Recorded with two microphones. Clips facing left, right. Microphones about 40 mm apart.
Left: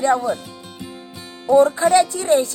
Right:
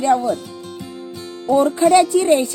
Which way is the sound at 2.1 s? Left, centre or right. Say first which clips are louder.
Right 3 dB; centre.